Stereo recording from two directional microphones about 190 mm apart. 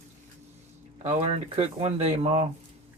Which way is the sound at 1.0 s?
35° right (ahead or behind).